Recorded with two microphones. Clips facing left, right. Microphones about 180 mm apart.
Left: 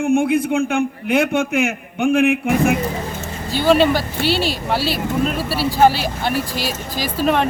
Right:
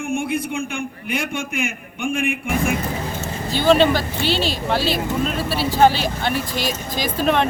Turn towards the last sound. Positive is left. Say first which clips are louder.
# left 1 dB
turn(degrees=5)  # may be behind; listen again after turning